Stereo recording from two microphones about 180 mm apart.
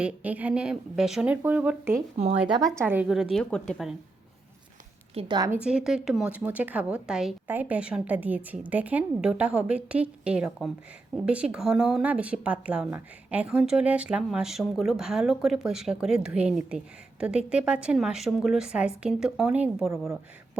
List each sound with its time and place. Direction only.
0.0 s a woman's voice: 10° right (ahead or behind)
2.1 s speech: 35° right (ahead or behind)
2.8 s a woman's voice: 10° right (ahead or behind)
5.1 s a woman's voice: 25° right (ahead or behind)
5.6 s a woman's voice: 5° right (ahead or behind)